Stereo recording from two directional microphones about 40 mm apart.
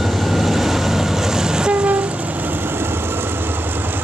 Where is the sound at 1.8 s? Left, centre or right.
Right.